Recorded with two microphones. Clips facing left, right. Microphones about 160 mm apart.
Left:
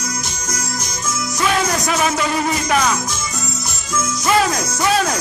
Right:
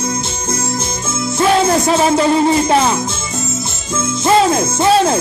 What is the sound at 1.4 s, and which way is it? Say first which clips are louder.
Music: right 7 dB; 30° right (ahead or behind).